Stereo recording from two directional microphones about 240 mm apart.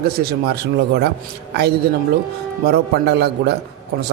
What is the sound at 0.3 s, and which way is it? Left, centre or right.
Speech, right.